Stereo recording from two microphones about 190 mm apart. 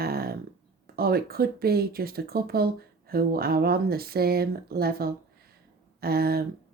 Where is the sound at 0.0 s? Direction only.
55° right (ahead or behind).